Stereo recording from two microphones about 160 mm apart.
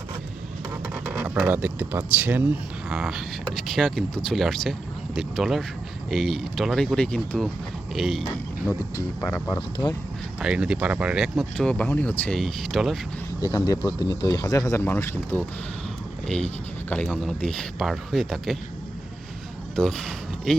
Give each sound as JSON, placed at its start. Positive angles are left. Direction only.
{"t": 1.0, "sound": "speech", "side_deg": -10}
{"t": 9.2, "sound": "speech", "side_deg": 10}
{"t": 10.4, "sound": "speech", "side_deg": -5}
{"t": 13.5, "sound": "speech", "side_deg": 20}
{"t": 19.7, "sound": "speech", "side_deg": 5}